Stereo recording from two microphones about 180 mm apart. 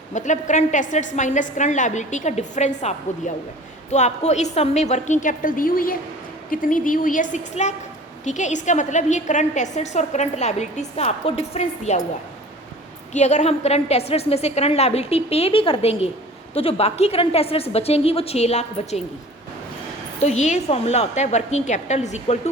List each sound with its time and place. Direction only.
0.1 s a woman's voice: 45° left (ahead or behind)
13.1 s a woman's voice: 40° left (ahead or behind)
20.1 s a woman's voice: 40° left (ahead or behind)